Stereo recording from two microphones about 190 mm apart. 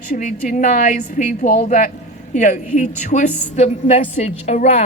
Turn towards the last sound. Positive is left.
turn(degrees=35)  # may be behind; listen again after turning